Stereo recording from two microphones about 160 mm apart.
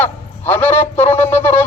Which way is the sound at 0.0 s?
15° left (ahead or behind).